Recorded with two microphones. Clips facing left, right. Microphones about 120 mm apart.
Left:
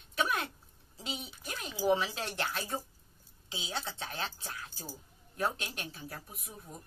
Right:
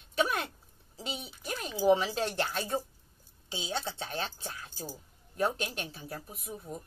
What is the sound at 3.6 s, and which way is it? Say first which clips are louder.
Speech: right 4 dB; 30° right (ahead or behind).